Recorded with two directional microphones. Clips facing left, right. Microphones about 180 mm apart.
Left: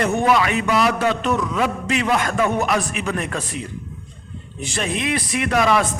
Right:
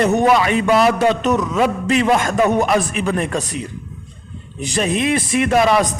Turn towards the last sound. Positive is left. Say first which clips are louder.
# right 4 dB
turn(degrees=-30)  # may be behind; listen again after turning